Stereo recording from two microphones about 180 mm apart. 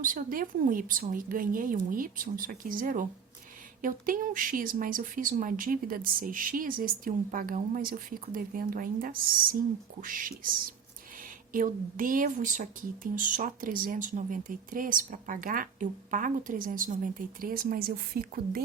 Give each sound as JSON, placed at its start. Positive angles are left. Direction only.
{"t": 0.0, "sound": "speech", "side_deg": -50}
{"t": 11.5, "sound": "speech", "side_deg": -50}